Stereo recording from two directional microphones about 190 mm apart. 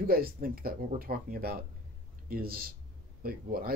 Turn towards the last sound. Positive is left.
turn(degrees=-50)  # may be behind; listen again after turning